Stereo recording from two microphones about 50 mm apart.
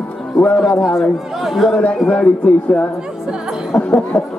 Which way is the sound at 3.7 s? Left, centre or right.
Left.